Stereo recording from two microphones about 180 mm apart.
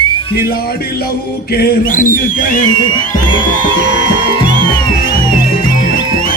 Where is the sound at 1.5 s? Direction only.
55° left (ahead or behind).